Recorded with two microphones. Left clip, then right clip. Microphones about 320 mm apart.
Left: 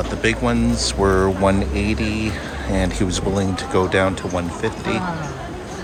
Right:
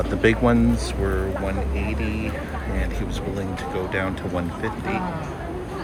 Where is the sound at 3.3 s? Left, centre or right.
Centre.